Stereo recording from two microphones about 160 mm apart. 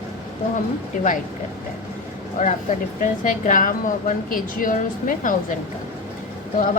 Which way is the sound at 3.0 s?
55° left (ahead or behind).